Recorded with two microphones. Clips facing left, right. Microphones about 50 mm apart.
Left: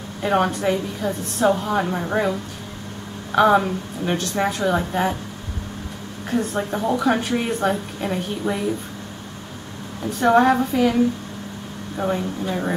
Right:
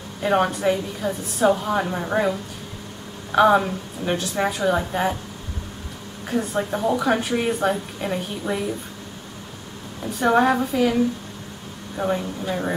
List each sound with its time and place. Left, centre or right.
0.2 s a woman's voice: centre
6.2 s a woman's voice: centre
10.0 s a woman's voice: centre
12.0 s a woman's voice: centre